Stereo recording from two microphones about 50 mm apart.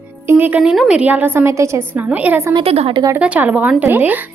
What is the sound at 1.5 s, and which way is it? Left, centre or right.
Speech, right.